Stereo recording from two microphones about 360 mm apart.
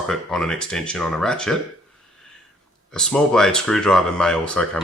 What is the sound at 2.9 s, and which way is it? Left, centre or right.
Speech, centre.